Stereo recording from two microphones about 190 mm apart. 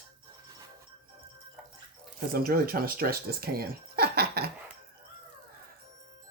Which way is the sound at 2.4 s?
50° right (ahead or behind).